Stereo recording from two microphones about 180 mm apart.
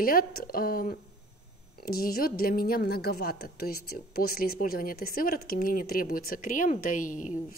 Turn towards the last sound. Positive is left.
turn(degrees=45)  # may be behind; listen again after turning